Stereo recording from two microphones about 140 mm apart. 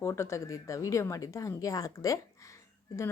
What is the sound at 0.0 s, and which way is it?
Speech, 20° left (ahead or behind).